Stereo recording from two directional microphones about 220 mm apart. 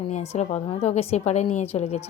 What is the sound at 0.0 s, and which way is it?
A woman's voice, 30° left (ahead or behind).